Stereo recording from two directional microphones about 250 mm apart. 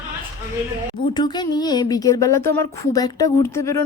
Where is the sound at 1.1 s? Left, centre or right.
Centre.